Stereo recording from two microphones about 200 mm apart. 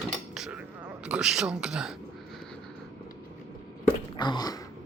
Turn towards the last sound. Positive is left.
turn(degrees=20)  # may be behind; listen again after turning